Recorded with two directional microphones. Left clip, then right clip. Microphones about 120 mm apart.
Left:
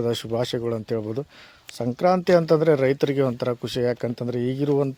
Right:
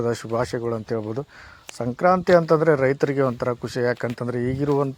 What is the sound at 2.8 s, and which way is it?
Speech, 20° left (ahead or behind).